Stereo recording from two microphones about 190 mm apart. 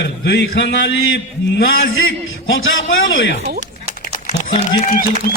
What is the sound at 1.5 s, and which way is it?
A man's voice, 80° left.